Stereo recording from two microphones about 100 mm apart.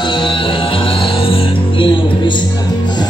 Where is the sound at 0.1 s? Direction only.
55° left (ahead or behind).